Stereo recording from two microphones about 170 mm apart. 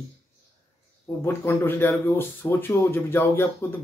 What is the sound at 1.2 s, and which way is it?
Speech, 15° left (ahead or behind).